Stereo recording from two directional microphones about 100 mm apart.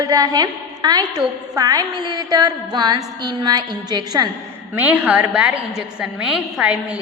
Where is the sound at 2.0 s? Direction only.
40° right (ahead or behind).